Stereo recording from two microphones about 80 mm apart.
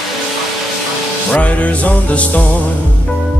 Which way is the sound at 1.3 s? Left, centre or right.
Centre.